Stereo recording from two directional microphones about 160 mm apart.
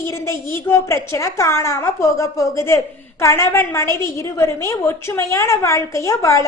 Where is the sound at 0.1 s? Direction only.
20° left (ahead or behind).